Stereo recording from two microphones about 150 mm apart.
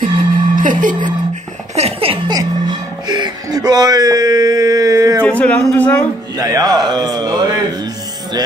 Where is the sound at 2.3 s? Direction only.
30° right (ahead or behind).